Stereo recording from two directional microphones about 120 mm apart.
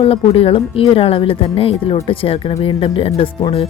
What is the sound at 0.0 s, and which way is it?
Speech, 55° left (ahead or behind).